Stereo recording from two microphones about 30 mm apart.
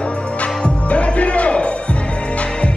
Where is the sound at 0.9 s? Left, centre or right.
Left.